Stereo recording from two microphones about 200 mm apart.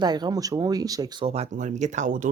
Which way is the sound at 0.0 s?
20° right (ahead or behind).